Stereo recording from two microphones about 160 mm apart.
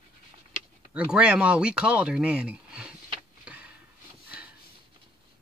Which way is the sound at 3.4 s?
5° right (ahead or behind).